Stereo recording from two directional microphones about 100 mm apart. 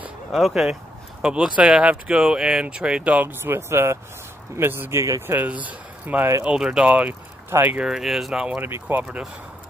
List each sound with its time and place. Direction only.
0.3 s speech: centre (ahead or behind); by 9.0 s 20° right (ahead or behind)
9.0 s speech: 5° right (ahead or behind)